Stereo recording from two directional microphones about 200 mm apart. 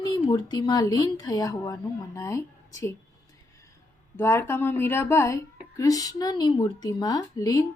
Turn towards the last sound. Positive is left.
turn(degrees=20)  # may be behind; listen again after turning